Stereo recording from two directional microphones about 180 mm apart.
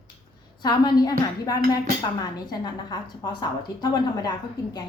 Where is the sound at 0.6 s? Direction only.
25° left (ahead or behind).